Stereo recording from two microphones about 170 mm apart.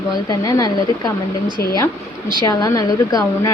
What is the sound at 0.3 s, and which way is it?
A woman's voice, 20° left (ahead or behind).